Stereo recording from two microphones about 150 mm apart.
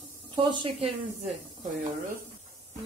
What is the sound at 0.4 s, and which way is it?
Speech, 30° right (ahead or behind).